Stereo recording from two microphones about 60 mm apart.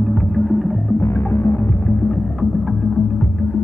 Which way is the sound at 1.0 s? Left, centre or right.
Left.